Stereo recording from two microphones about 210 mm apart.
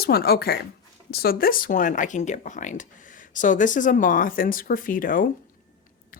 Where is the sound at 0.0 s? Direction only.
45° left (ahead or behind).